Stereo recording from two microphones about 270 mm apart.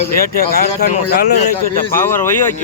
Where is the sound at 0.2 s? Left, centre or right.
Left.